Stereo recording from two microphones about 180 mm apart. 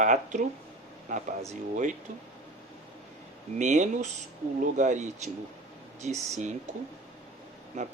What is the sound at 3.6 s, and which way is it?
Speech, 40° right (ahead or behind).